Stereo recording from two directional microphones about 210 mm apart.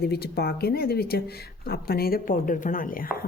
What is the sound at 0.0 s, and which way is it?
A woman's voice, 50° left (ahead or behind).